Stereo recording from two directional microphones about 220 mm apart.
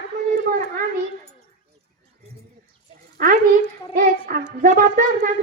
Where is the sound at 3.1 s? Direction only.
40° right (ahead or behind).